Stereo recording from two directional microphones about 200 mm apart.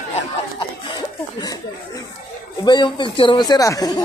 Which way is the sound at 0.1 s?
20° left (ahead or behind).